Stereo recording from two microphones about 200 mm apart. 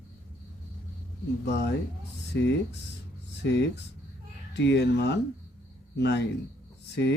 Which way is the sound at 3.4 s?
60° left (ahead or behind).